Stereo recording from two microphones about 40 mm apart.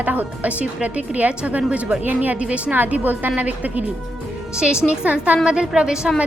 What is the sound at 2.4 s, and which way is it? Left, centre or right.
Speech, right.